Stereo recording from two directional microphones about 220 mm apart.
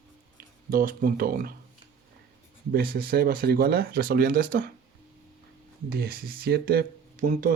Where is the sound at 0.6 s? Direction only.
40° right (ahead or behind).